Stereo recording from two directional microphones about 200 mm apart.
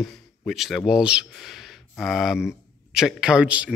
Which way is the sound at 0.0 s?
Centre (ahead or behind).